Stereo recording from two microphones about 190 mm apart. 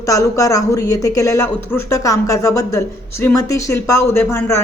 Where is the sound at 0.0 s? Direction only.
15° left (ahead or behind).